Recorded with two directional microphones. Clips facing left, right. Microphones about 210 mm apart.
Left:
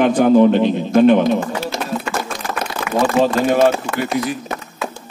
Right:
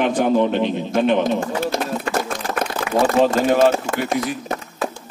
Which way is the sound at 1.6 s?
50° right (ahead or behind).